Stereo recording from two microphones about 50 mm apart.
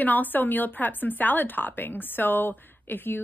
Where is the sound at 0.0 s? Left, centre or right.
Left.